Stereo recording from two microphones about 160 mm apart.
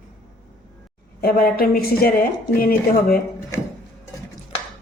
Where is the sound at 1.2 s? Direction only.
70° left (ahead or behind).